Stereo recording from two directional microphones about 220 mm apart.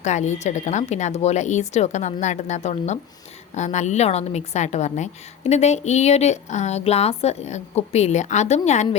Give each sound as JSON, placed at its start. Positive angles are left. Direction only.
{"t": 0.0, "sound": "a woman's voice", "side_deg": 30}